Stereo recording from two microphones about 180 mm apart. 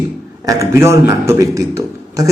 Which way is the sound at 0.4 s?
20° right (ahead or behind).